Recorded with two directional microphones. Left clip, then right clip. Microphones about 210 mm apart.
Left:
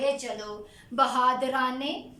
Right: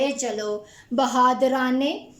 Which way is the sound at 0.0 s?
40° right (ahead or behind).